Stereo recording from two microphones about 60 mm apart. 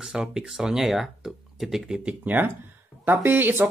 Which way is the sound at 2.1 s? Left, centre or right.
Right.